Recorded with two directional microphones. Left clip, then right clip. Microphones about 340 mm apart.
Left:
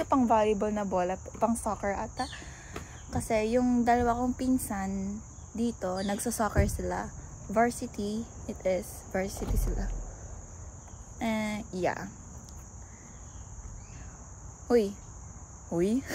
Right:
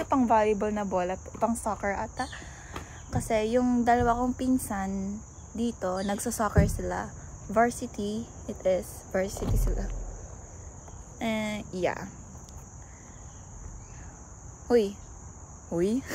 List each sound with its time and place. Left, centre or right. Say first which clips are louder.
0.0 s speech: right 1 dB; centre
11.1 s speech: right 1 dB; centre
14.7 s speech: right 2 dB; centre